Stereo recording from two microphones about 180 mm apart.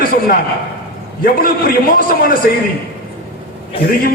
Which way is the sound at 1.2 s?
50° left (ahead or behind).